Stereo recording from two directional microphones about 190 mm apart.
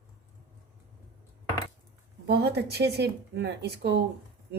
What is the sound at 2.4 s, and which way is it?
Speech, 60° right (ahead or behind).